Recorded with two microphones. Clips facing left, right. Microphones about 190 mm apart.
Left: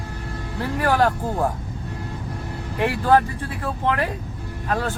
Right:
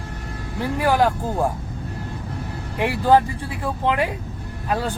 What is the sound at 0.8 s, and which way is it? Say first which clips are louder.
Speech: right 1 dB; 15° right (ahead or behind).